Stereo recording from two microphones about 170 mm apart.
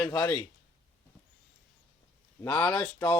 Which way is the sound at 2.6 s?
5° left (ahead or behind).